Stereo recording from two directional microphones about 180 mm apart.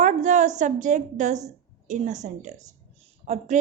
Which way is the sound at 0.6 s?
45° right (ahead or behind).